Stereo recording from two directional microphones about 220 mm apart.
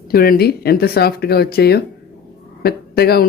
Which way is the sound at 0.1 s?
45° left (ahead or behind).